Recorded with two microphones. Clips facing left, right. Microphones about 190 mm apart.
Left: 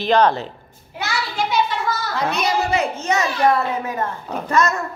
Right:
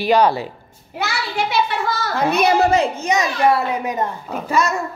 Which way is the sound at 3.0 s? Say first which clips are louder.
Right 1 dB; 15° right (ahead or behind).